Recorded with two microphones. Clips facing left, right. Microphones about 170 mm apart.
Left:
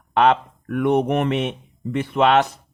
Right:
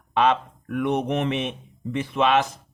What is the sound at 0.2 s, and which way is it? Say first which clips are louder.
Speech: left 4 dB; 55° left (ahead or behind).